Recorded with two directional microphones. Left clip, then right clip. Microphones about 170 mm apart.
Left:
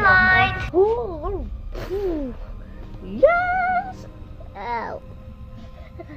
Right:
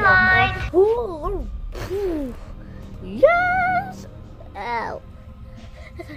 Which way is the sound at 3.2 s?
15° right (ahead or behind).